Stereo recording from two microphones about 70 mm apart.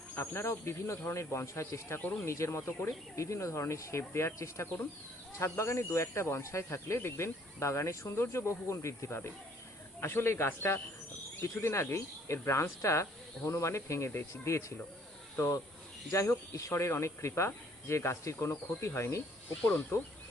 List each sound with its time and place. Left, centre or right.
0.2 s speech: left